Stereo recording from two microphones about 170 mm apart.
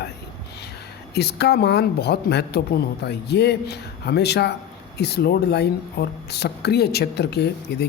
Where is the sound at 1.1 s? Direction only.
75° left (ahead or behind).